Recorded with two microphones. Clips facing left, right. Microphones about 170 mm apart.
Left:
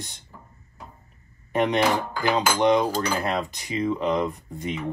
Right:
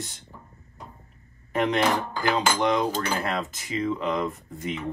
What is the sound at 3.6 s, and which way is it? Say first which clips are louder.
Speech: left 2 dB; 15° left (ahead or behind).